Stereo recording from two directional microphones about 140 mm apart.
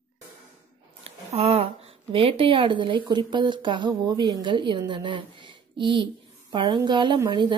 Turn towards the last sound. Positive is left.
turn(degrees=-35)  # may be behind; listen again after turning